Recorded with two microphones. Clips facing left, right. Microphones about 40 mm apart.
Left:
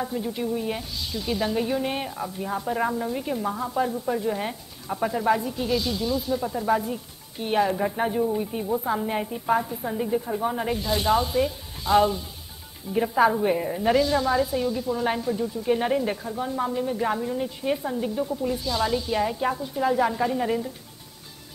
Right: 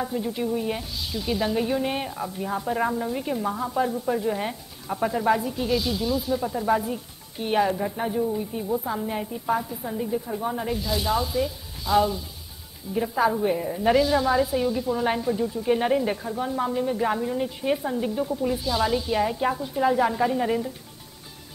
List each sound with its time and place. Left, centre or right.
0.0 s speech: centre
7.7 s a woman's voice: centre
13.8 s speech: centre